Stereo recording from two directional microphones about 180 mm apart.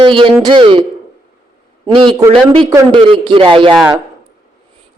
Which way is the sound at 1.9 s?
25° right (ahead or behind).